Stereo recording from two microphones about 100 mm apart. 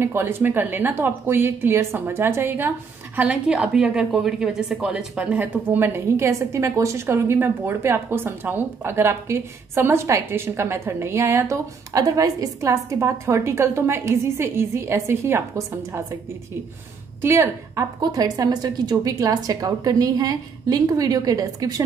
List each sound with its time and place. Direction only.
0.0 s a woman's voice: 25° right (ahead or behind)
3.2 s a woman's voice: 10° right (ahead or behind); by 16.2 s 30° right (ahead or behind)
17.2 s a woman's voice: 30° right (ahead or behind)